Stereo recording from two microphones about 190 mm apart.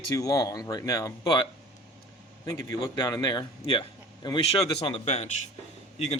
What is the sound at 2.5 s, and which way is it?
A man's voice, 20° left (ahead or behind).